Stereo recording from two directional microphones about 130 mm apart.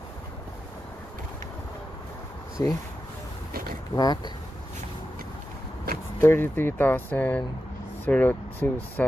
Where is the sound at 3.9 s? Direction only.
30° left (ahead or behind).